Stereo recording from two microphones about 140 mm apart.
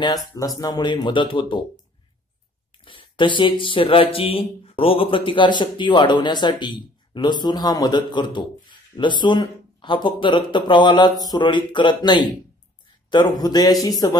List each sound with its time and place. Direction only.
0.6 s a man's voice: 30° left (ahead or behind)
2.8 s a man's voice: 40° left (ahead or behind)